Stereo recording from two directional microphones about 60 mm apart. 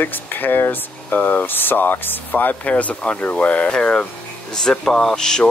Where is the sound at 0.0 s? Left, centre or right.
Left.